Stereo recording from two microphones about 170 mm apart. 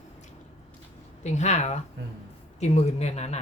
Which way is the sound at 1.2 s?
45° left (ahead or behind).